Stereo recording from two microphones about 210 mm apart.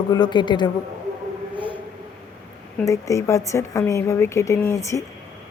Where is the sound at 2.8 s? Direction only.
15° left (ahead or behind).